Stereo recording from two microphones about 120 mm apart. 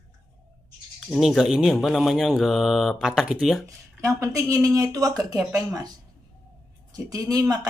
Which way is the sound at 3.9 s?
25° right (ahead or behind).